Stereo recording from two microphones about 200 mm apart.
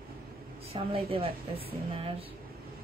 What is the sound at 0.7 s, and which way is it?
Speech, 25° right (ahead or behind).